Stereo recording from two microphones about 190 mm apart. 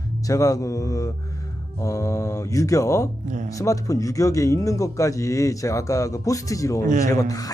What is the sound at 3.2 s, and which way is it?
Speech, 40° right (ahead or behind).